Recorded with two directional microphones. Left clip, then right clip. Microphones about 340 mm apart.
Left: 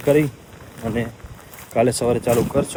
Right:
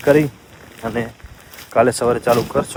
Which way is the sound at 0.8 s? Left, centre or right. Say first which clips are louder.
Right 2 dB; centre.